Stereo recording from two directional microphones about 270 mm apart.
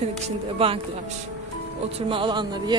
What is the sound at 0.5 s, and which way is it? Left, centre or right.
Speech, right.